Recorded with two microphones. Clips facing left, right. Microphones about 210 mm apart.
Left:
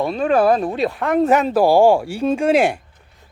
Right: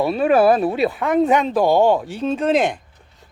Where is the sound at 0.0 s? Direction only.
5° right (ahead or behind); by 2.7 s 10° left (ahead or behind).